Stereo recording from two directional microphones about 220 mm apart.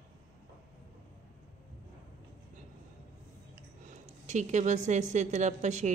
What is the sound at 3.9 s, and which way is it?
A woman's voice, 30° right (ahead or behind).